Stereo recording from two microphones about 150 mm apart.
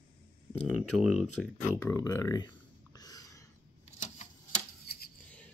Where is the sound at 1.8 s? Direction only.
20° left (ahead or behind).